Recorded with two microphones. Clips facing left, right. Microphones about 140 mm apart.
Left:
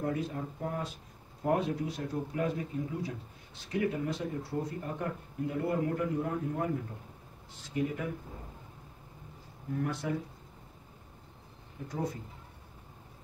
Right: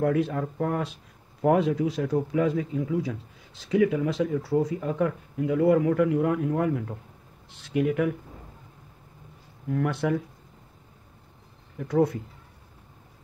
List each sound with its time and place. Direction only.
0.0 s speech: 90° right
9.7 s speech: 75° right (ahead or behind)
11.9 s speech: 70° right (ahead or behind)